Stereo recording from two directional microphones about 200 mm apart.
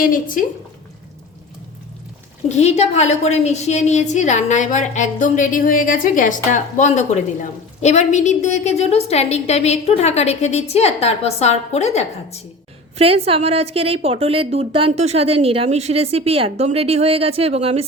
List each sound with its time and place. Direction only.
0.0 s speech: 40° left (ahead or behind)
2.5 s a woman's voice: 35° left (ahead or behind)
13.0 s a woman's voice: 30° right (ahead or behind)